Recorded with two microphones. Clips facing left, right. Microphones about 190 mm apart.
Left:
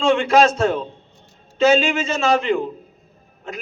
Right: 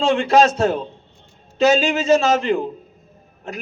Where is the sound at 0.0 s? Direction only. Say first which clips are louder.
Even; 35° right (ahead or behind).